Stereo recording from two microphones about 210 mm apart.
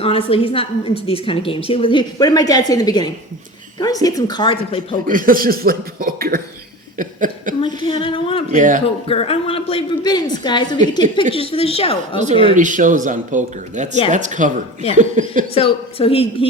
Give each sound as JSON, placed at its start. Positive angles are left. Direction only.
{"t": 0.0, "sound": "a woman's voice", "side_deg": 25}
{"t": 5.0, "sound": "speech", "side_deg": -40}
{"t": 6.9, "sound": "a sound", "side_deg": -40}
{"t": 7.6, "sound": "female singing", "side_deg": 25}
{"t": 8.5, "sound": "speech", "side_deg": -40}
{"t": 9.0, "sound": "a woman's voice", "side_deg": 25}
{"t": 12.5, "sound": "speech", "side_deg": -40}
{"t": 15.5, "sound": "a woman's voice", "side_deg": 25}